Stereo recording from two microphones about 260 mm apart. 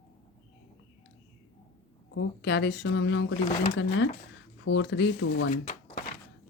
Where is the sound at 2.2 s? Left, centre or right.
Left.